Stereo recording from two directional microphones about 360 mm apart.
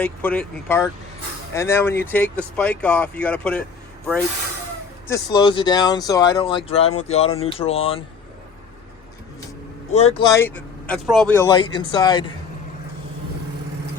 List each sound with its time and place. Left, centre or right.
0.0 s speech: centre
5.0 s speech: centre
9.9 s speech: centre